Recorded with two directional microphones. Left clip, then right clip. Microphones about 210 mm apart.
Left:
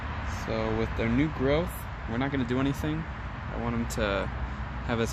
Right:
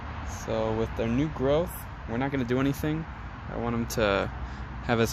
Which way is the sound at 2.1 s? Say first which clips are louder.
Right 2 dB; 40° right (ahead or behind).